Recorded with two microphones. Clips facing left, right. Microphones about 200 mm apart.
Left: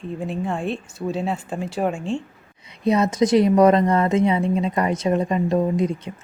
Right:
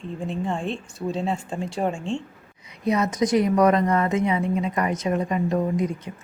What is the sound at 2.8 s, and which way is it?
A woman's voice, 30° left (ahead or behind).